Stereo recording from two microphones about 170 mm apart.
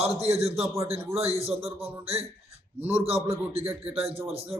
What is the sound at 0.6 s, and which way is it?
Speech, 15° right (ahead or behind).